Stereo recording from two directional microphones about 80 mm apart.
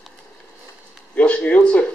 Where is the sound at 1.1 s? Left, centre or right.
Centre.